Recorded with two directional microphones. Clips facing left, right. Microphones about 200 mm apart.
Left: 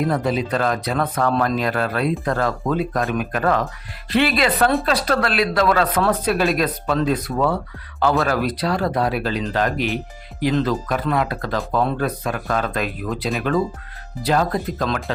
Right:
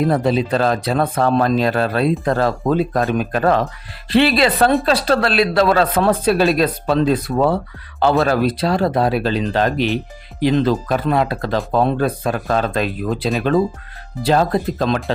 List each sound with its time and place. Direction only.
0.0 s speech: 30° right (ahead or behind)